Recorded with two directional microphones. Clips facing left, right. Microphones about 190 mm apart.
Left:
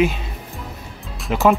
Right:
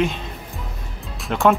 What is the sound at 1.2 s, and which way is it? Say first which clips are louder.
Speech: left 1 dB; centre (ahead or behind).